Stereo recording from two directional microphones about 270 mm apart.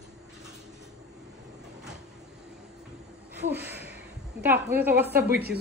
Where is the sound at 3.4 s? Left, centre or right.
Right.